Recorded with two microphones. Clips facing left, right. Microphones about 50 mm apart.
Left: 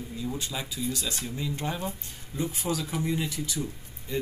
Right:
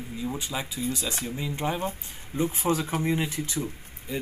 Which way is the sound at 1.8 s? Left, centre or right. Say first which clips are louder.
Right 3 dB; right.